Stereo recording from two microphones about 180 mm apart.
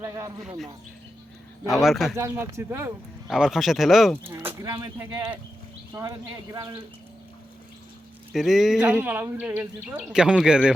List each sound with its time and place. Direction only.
0.0 s speech: 20° right (ahead or behind)
1.7 s speech: centre (ahead or behind)
2.1 s speech: 15° right (ahead or behind)
3.2 s speech: 5° right (ahead or behind)
4.2 s speech: 15° right (ahead or behind)
8.3 s speech: centre (ahead or behind)